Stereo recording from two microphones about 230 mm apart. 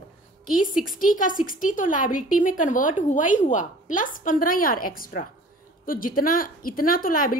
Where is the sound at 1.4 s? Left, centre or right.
Left.